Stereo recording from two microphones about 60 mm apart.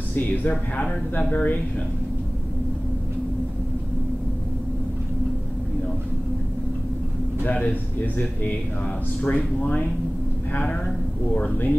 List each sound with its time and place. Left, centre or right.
0.1 s a man's voice: left
7.4 s a man's voice: left